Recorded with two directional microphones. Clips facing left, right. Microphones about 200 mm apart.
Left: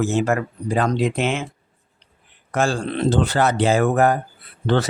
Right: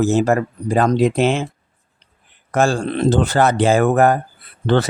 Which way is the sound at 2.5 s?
45° right (ahead or behind).